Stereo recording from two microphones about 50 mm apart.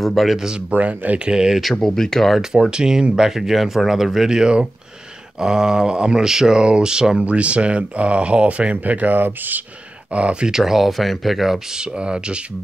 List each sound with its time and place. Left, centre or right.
0.0 s speech: centre
0.4 s speech: centre
0.7 s speech: right
1.6 s speech: centre
2.7 s speech: centre; by 9.6 s right
10.1 s speech: right
10.5 s speech: centre
11.7 s speech: centre